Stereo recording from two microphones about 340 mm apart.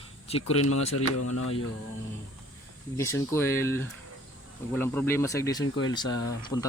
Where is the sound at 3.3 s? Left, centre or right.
Centre.